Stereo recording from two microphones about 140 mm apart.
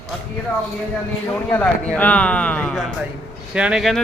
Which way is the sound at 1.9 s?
10° left (ahead or behind).